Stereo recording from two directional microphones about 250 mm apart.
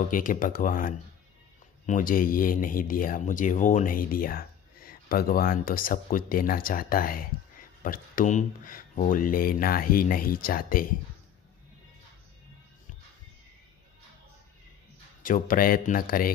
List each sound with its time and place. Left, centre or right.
0.1 s speech: left
15.2 s speech: left